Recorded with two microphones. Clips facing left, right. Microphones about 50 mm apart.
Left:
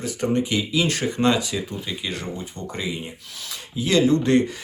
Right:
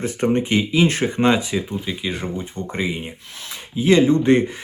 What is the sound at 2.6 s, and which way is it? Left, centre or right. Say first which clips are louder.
Speech: right 4 dB; right.